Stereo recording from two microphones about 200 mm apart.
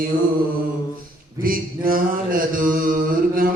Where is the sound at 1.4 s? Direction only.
45° right (ahead or behind).